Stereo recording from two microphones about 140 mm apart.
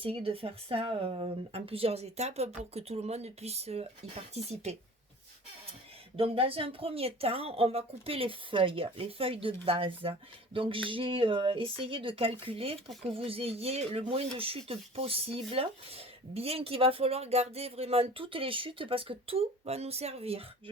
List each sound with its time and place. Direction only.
0.0 s speech: 40° right (ahead or behind)
6.1 s speech: 40° right (ahead or behind)